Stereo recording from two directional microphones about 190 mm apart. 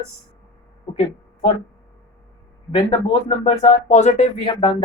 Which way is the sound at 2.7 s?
30° left (ahead or behind).